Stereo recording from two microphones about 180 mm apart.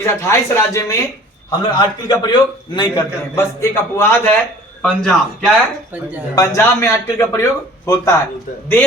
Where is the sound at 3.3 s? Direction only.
15° left (ahead or behind).